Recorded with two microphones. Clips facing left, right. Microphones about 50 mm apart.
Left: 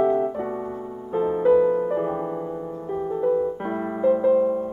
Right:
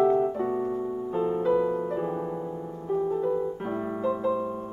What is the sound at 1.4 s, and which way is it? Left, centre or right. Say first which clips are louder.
Music: left 10 dB; left.